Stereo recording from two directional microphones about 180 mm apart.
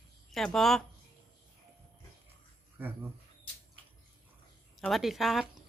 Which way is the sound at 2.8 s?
10° right (ahead or behind).